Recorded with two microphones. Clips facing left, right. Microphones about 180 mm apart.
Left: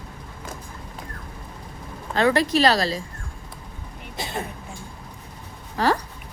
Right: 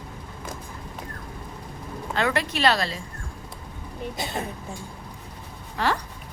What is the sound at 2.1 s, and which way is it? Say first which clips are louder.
Speech: left 6 dB; 35° left (ahead or behind).